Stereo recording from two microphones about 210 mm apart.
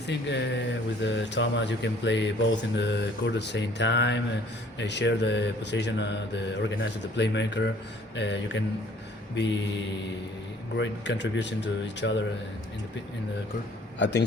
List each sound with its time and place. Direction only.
0.1 s mantra: 55° left (ahead or behind)
10.8 s mantra: 55° left (ahead or behind)
14.0 s a man's voice: 55° left (ahead or behind)